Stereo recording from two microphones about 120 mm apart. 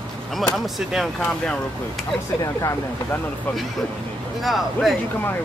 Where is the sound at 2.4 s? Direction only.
30° left (ahead or behind).